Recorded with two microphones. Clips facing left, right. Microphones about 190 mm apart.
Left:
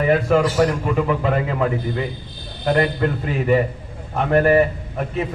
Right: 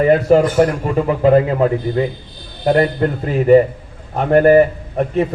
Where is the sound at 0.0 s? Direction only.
35° right (ahead or behind).